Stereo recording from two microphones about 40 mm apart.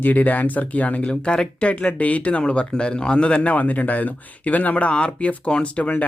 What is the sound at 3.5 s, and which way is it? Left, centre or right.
Speech, left.